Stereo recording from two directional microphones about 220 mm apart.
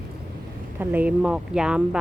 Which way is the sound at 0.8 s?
5° right (ahead or behind).